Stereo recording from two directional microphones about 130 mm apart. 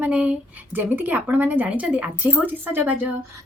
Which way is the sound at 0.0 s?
10° right (ahead or behind).